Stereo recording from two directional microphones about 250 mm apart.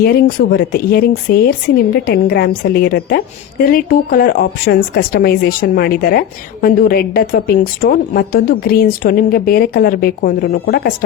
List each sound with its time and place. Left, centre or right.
0.0 s a woman's voice: left